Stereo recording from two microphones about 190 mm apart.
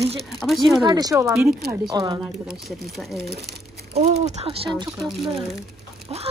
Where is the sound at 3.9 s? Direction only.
35° right (ahead or behind).